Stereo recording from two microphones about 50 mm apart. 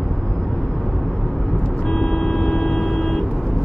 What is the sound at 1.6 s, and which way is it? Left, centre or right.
Vehicle, left.